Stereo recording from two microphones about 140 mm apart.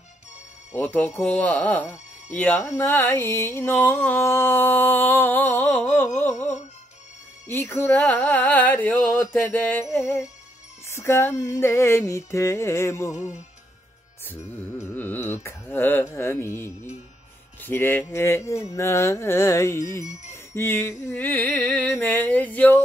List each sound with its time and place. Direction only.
0.7 s music: 10° left (ahead or behind)
7.4 s music: 15° left (ahead or behind)
10.9 s a sound: 20° left (ahead or behind)
14.2 s music: 15° left (ahead or behind)
17.6 s a sound: 15° left (ahead or behind)
20.5 s music: 15° left (ahead or behind)